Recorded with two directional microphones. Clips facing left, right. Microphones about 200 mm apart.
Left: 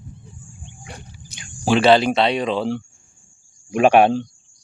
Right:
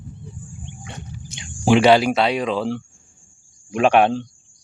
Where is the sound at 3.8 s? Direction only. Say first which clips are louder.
Left 2 dB; 10° left (ahead or behind).